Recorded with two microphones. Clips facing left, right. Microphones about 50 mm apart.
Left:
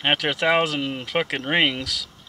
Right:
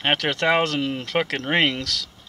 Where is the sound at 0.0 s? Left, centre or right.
Centre.